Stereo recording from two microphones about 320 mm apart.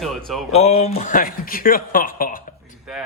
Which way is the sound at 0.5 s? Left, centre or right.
Centre.